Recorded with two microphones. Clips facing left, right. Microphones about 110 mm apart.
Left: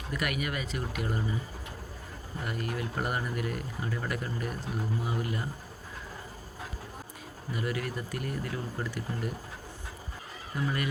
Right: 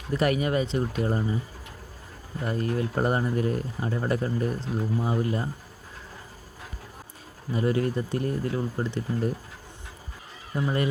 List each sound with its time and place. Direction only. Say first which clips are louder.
0.1 s speech: right 9 dB; 30° right (ahead or behind)
2.4 s speech: right 7 dB; 30° right (ahead or behind)
7.5 s speech: right 9 dB; 30° right (ahead or behind)
10.5 s speech: right 5 dB; 30° right (ahead or behind)